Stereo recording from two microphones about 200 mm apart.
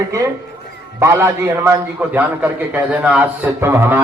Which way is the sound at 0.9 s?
15° right (ahead or behind).